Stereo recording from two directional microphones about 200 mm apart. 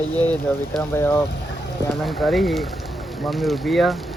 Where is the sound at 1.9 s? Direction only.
Centre (ahead or behind).